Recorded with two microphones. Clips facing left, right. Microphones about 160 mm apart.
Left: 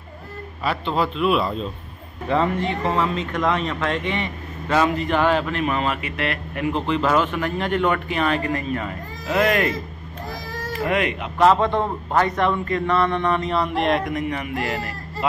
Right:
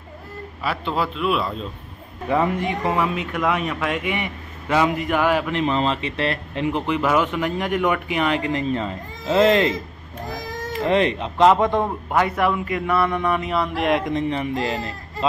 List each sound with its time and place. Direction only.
0.7 s a man's voice: 5° right (ahead or behind)
2.2 s speech: 15° right (ahead or behind)
5.6 s a man's voice: 25° right (ahead or behind)
11.4 s speech: 15° right (ahead or behind)
14.0 s a man's voice: 25° right (ahead or behind)